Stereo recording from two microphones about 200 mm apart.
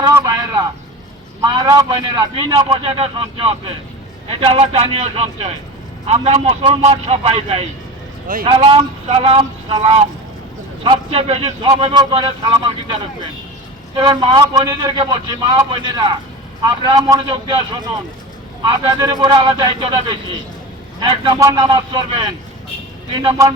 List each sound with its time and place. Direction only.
0.0 s a sound: 15° right (ahead or behind)
1.4 s a man's voice: 20° right (ahead or behind)
21.0 s a man's voice: 25° right (ahead or behind)